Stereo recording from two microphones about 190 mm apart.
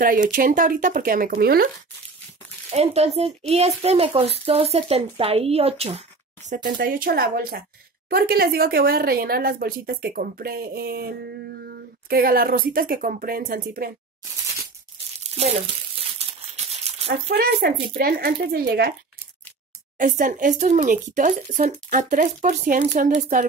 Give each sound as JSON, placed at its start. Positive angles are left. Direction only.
{"t": 0.0, "sound": "speech", "side_deg": -45}
{"t": 2.7, "sound": "speech", "side_deg": -35}
{"t": 15.2, "sound": "a sound", "side_deg": -35}
{"t": 16.0, "sound": "crumpling", "side_deg": -30}
{"t": 17.3, "sound": "speech", "side_deg": -60}
{"t": 20.0, "sound": "speech", "side_deg": -45}